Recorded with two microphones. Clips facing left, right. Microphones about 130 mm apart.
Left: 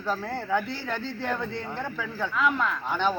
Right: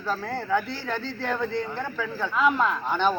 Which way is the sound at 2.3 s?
25° right (ahead or behind).